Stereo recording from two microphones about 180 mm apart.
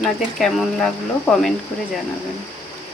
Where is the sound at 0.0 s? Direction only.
Centre (ahead or behind).